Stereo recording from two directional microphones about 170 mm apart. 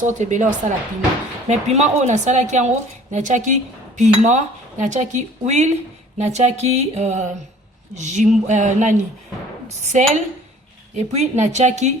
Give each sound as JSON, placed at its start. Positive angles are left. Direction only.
{"t": 0.0, "sound": "a woman's voice", "side_deg": -45}